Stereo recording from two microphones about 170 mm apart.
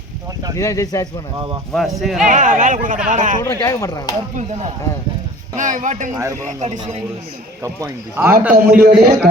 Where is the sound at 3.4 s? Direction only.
20° left (ahead or behind).